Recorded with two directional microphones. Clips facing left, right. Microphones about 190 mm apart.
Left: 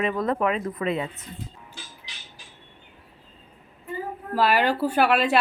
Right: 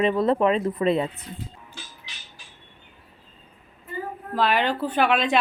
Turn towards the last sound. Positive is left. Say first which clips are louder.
# left 1 dB
turn(degrees=5)  # may be behind; listen again after turning